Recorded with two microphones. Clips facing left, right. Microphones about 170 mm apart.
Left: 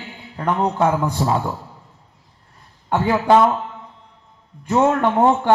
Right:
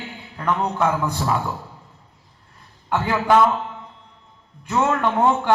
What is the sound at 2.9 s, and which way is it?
Speech, 25° left (ahead or behind).